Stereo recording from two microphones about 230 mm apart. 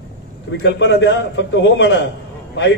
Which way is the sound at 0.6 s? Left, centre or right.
Left.